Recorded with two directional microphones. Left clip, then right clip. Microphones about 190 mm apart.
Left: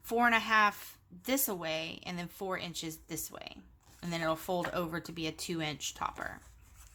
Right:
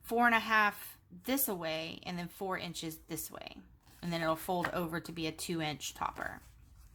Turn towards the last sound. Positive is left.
turn(degrees=0)  # may be behind; listen again after turning